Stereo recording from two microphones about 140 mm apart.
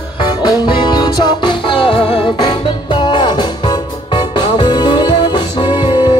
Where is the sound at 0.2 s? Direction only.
35° left (ahead or behind).